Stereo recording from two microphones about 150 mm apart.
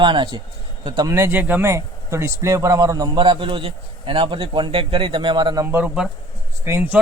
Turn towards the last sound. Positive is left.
turn(degrees=-15)  # may be behind; listen again after turning